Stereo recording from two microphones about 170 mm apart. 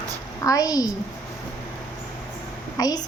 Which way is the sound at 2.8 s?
20° left (ahead or behind).